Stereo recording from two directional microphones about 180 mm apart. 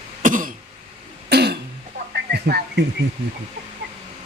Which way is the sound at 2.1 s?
60° right (ahead or behind).